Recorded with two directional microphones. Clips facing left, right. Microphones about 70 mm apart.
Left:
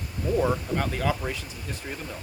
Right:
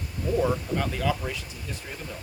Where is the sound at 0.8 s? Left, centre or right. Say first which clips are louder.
Even; left.